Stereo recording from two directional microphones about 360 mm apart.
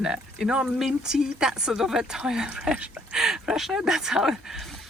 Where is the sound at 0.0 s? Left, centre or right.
Centre.